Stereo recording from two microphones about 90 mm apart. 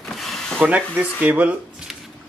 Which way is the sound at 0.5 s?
20° right (ahead or behind).